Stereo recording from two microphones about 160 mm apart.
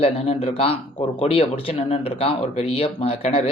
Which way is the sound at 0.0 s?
40° left (ahead or behind).